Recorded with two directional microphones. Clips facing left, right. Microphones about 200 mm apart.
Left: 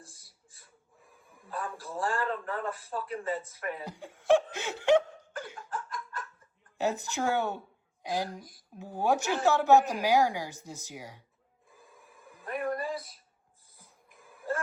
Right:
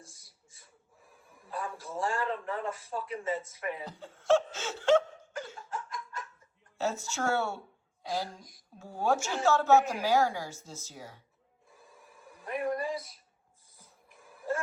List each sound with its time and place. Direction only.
0.1 s a sound: centre (ahead or behind)
3.6 s speech: centre (ahead or behind)
3.8 s speech: 15° left (ahead or behind)
5.7 s laughter: centre (ahead or behind)
6.7 s a woman's voice: 15° left (ahead or behind)
8.4 s speech: centre (ahead or behind)
8.8 s a woman's voice: 15° left (ahead or behind)
11.8 s a sound: centre (ahead or behind)
12.7 s a man's voice: centre (ahead or behind)
14.3 s music: centre (ahead or behind)